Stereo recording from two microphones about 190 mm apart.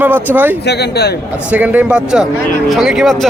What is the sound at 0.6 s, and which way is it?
Speech, 60° left (ahead or behind).